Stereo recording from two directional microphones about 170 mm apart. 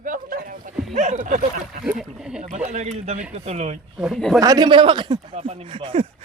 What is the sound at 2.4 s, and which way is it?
Speech, 45° right (ahead or behind).